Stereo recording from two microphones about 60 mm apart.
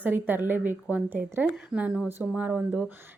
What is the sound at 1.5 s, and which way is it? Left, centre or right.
Speech, centre.